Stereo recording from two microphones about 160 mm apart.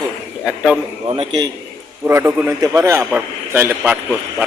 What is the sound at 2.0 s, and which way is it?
A man's voice, 15° right (ahead or behind).